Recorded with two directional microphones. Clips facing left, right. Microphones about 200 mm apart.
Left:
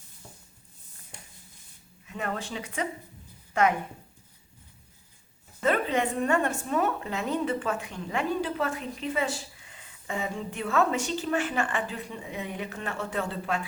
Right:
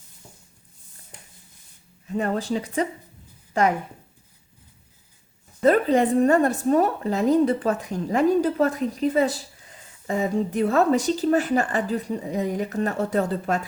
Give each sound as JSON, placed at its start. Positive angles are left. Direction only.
{"t": 2.0, "sound": "speech", "side_deg": -35}
{"t": 5.6, "sound": "speech", "side_deg": -40}